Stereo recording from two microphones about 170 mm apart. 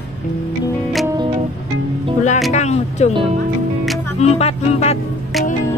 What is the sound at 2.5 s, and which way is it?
Music, 40° left (ahead or behind).